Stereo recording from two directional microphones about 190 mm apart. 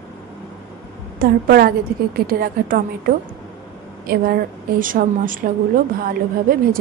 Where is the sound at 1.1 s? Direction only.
55° right (ahead or behind).